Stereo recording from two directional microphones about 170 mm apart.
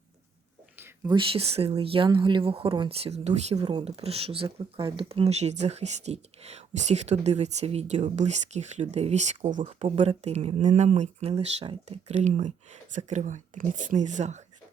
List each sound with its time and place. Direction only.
1.0 s speech: 30° right (ahead or behind)
3.5 s speech: 25° right (ahead or behind); by 14.4 s 45° right (ahead or behind)